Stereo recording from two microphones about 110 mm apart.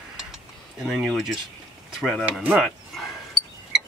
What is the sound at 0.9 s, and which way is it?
Speech, centre (ahead or behind).